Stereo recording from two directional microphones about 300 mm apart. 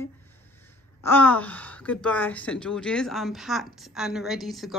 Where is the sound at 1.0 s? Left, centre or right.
Centre.